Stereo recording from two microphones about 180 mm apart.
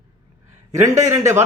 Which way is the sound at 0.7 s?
15° right (ahead or behind).